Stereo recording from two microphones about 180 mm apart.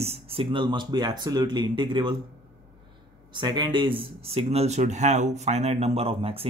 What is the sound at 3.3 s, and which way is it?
Speech, 25° right (ahead or behind).